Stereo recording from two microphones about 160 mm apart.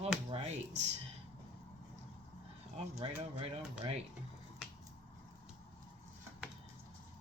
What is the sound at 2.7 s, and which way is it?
Speech, 40° right (ahead or behind).